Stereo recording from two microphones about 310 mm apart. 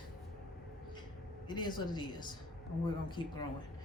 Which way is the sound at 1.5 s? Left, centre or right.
Centre.